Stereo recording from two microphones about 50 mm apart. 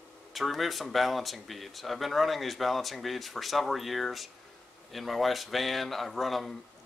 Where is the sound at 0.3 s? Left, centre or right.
Centre.